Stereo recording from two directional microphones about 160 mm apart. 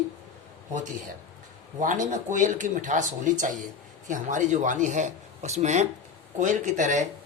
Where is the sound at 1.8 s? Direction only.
55° right (ahead or behind).